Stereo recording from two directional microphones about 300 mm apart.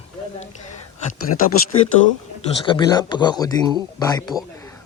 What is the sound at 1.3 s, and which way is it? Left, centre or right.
Speech, left.